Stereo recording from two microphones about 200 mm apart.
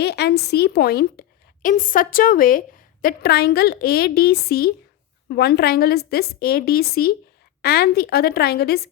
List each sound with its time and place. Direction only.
0.0 s a woman's voice: 55° left (ahead or behind)